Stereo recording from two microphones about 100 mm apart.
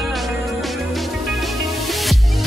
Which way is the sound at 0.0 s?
Centre (ahead or behind).